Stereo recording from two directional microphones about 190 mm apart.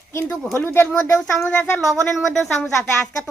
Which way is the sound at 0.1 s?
10° left (ahead or behind).